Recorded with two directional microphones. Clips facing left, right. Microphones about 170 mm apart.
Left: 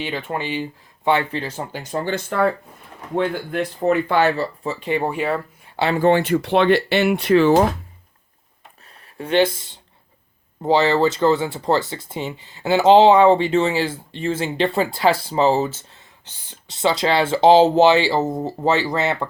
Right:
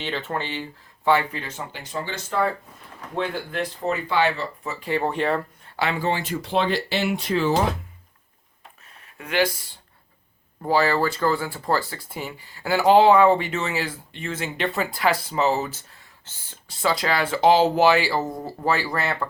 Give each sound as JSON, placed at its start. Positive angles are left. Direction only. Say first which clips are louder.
{"t": 0.0, "sound": "speech", "louder": "left 3 dB", "side_deg": 10}
{"t": 1.4, "sound": "speech", "louder": "left 6 dB", "side_deg": 35}
{"t": 5.9, "sound": "speech", "louder": "left 11 dB", "side_deg": 55}
{"t": 9.1, "sound": "speech", "louder": "left 5 dB", "side_deg": 30}